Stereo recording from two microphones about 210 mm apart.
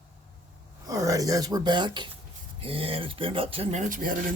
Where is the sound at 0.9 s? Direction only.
15° right (ahead or behind).